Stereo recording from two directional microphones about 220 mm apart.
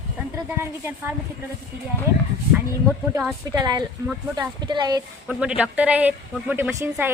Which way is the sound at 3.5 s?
20° right (ahead or behind).